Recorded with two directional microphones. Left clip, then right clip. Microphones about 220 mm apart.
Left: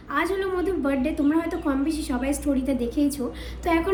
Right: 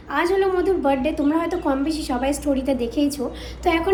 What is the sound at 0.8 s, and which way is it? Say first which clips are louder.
A woman's voice: right 4 dB; 5° right (ahead or behind).